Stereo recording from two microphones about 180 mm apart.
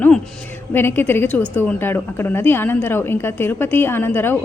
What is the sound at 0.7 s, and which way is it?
A woman's voice, 10° left (ahead or behind).